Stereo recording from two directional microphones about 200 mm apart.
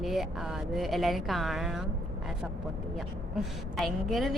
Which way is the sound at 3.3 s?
Centre (ahead or behind).